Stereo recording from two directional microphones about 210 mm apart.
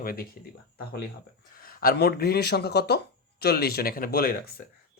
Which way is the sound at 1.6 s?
45° left (ahead or behind).